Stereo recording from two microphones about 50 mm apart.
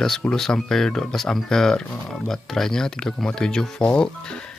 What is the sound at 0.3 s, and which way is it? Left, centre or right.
Speech, centre.